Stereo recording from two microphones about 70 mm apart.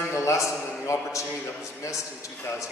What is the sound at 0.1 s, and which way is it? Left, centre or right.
A man's voice, left.